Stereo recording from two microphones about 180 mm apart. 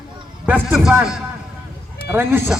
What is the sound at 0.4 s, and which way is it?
A man's voice, 5° right (ahead or behind).